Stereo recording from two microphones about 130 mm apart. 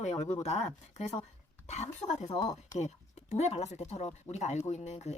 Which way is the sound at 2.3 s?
30° left (ahead or behind).